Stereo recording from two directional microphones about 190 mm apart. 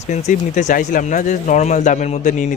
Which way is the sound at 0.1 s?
40° left (ahead or behind).